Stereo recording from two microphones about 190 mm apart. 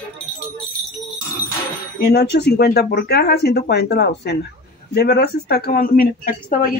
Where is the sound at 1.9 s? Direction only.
60° left (ahead or behind).